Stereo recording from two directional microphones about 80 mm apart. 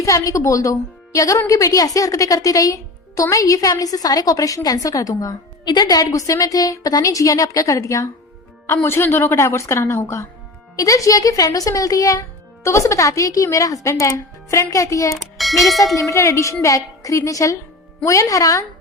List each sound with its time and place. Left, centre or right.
0.0 s a woman's voice: left
5.6 s a woman's voice: left
15.2 s speech: centre
16.0 s a woman's voice: left